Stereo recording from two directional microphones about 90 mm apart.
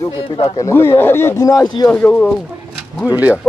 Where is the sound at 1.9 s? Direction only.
15° left (ahead or behind).